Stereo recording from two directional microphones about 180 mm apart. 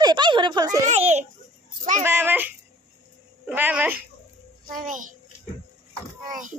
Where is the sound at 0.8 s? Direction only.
40° right (ahead or behind).